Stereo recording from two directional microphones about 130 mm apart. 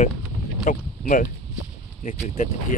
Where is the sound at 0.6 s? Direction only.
90° left.